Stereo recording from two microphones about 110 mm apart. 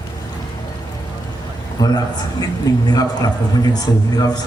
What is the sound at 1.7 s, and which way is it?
A man's voice, 35° left (ahead or behind).